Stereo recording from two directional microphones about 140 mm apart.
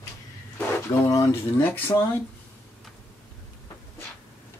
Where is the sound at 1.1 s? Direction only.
20° left (ahead or behind).